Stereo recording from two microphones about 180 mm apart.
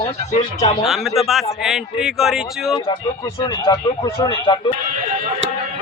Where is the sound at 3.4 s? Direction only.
25° left (ahead or behind).